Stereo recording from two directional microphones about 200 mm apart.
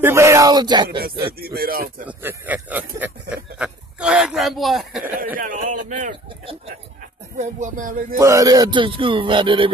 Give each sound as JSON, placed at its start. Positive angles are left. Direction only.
{"t": 0.0, "sound": "speech", "side_deg": -15}
{"t": 1.0, "sound": "speech", "side_deg": -50}
{"t": 2.0, "sound": "speech", "side_deg": -10}
{"t": 3.5, "sound": "a sound", "side_deg": -5}
{"t": 5.4, "sound": "a sound", "side_deg": -40}
{"t": 7.3, "sound": "speech", "side_deg": -40}
{"t": 8.2, "sound": "speech", "side_deg": -15}